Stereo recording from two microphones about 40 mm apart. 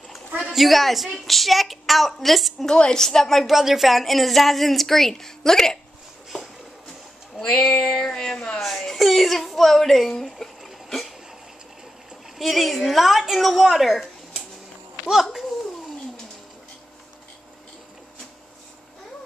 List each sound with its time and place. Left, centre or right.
0.6 s a woman's voice: centre
2.6 s a woman's voice: centre
3.5 s a woman's voice: centre
7.3 s a sound: centre
7.6 s a sound: centre
8.1 s a woman's voice: centre
12.4 s a woman's voice: centre
13.7 s a woman's voice: centre